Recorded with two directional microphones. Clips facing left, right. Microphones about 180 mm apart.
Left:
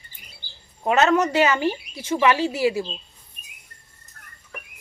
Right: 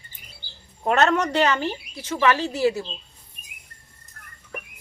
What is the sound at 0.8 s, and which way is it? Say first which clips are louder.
Speech: left 2 dB; 5° left (ahead or behind).